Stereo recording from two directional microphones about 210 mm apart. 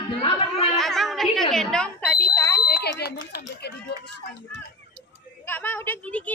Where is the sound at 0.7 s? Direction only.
Centre (ahead or behind).